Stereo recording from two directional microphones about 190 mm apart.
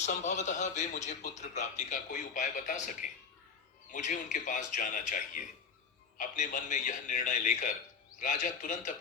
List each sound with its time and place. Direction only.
0.0 s a man's voice: 40° left (ahead or behind)